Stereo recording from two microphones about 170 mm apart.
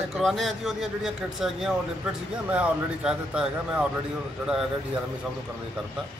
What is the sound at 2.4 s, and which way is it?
A man's voice, 5° right (ahead or behind).